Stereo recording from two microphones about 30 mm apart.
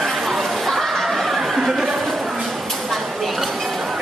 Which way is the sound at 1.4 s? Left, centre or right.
Centre.